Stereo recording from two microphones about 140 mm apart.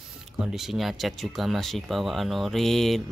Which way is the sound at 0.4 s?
5° right (ahead or behind).